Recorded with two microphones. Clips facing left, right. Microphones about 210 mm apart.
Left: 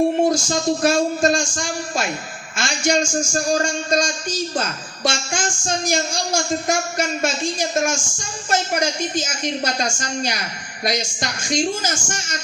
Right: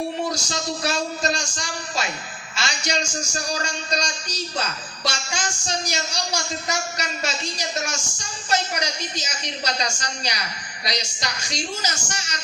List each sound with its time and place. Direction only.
0.3 s a man's voice: 50° left (ahead or behind)